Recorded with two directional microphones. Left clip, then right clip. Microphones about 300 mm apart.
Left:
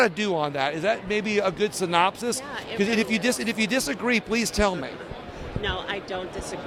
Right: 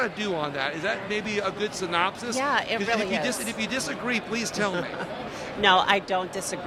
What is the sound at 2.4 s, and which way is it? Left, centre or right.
Speech, right.